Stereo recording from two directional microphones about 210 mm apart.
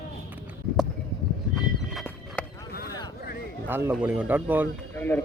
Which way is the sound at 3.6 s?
10° right (ahead or behind).